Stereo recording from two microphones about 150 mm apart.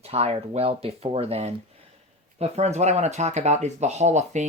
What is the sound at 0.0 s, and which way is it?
Speech, 45° right (ahead or behind).